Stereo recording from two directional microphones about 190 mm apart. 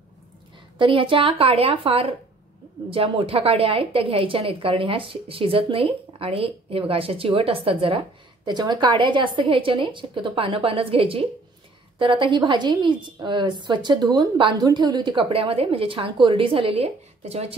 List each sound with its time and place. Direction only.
0.7 s a woman's voice: 25° right (ahead or behind)